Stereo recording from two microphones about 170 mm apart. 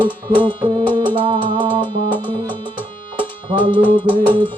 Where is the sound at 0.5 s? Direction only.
30° right (ahead or behind).